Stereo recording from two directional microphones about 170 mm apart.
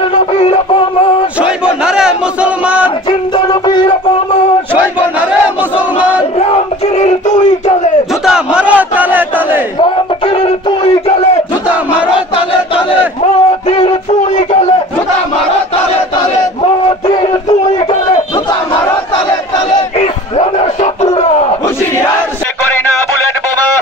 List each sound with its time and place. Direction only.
0.1 s synthetic singing: 35° left (ahead or behind)
1.9 s a sound: 5° right (ahead or behind)
3.1 s music: 25° left (ahead or behind)
6.4 s crowd: 40° left (ahead or behind)
8.3 s battle cry: 5° right (ahead or behind)
9.8 s music: 35° left (ahead or behind)
12.4 s battle cry: 35° left (ahead or behind)
19.7 s crowd: 40° left (ahead or behind)